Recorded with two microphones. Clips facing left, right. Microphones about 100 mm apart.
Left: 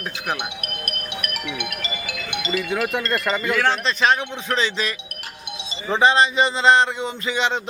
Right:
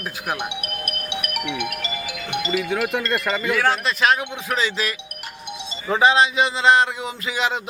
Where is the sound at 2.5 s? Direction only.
Centre (ahead or behind).